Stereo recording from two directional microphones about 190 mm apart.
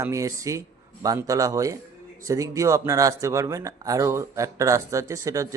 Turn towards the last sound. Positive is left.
turn(degrees=-15)  # may be behind; listen again after turning